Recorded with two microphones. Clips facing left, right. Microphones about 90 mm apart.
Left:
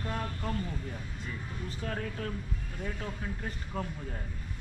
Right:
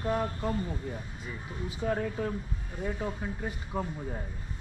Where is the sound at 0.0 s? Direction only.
15° right (ahead or behind).